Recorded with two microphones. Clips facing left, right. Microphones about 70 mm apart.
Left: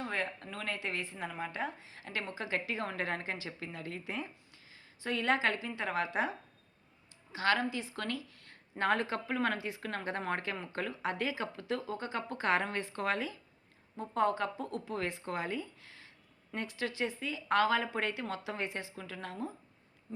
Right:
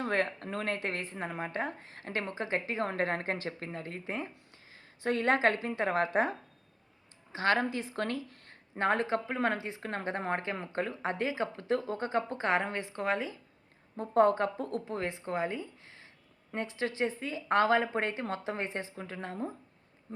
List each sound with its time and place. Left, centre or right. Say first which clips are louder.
0.0 s a woman's voice: right 6 dB; right
4.7 s a woman's voice: right 5 dB; right
7.3 s speech: right 2 dB; right
13.9 s a woman's voice: right 6 dB; right
14.9 s a woman's voice: right 2 dB; right
20.1 s bee: right 1 dB; right